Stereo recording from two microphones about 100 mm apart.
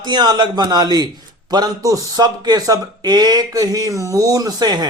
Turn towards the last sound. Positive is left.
turn(degrees=-45)  # may be behind; listen again after turning